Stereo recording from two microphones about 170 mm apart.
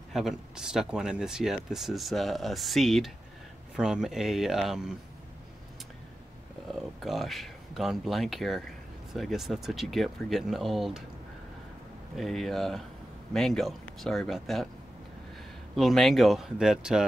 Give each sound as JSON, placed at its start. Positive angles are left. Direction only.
{"t": 0.1, "sound": "speech", "side_deg": 0}
{"t": 6.7, "sound": "speech", "side_deg": 0}
{"t": 12.2, "sound": "speech", "side_deg": 0}
{"t": 15.7, "sound": "speech", "side_deg": 0}